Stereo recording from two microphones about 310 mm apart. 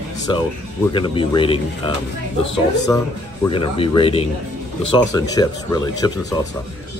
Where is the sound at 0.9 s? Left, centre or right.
Centre.